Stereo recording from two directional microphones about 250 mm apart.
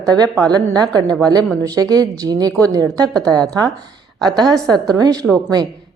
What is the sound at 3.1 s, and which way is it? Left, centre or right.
Speech, centre.